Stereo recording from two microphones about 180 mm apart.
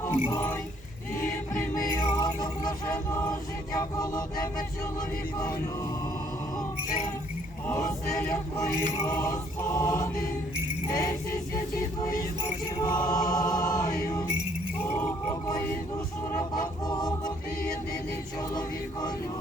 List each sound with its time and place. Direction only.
0.0 s music: 15° left (ahead or behind)
2.9 s chant: 15° left (ahead or behind)
7.7 s mantra: 15° left (ahead or behind)
10.8 s jingle bell: 20° left (ahead or behind)
12.8 s chant: 20° left (ahead or behind)
15.3 s chant: 20° left (ahead or behind)
18.3 s chant: 20° left (ahead or behind)